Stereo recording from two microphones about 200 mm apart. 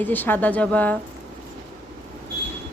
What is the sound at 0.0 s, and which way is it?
Speech, 10° left (ahead or behind).